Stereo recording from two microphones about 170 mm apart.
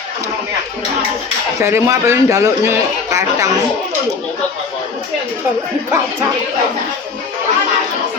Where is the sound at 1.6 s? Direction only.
15° right (ahead or behind).